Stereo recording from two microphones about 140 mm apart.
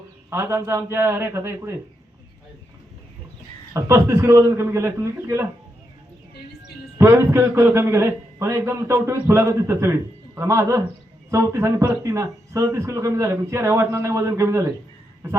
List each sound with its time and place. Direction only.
0.3 s a man's voice: 20° right (ahead or behind)
3.8 s a man's voice: 20° right (ahead or behind)
7.0 s a man's voice: 20° right (ahead or behind)